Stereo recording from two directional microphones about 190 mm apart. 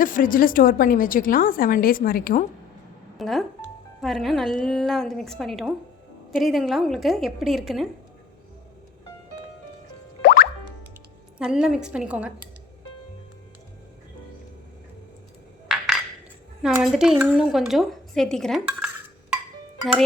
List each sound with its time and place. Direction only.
0.0 s a woman's voice: 45° left (ahead or behind)
3.2 s speech: centre (ahead or behind)
10.2 s music: 55° left (ahead or behind)
11.3 s speech: 5° right (ahead or behind)
16.6 s speech: centre (ahead or behind)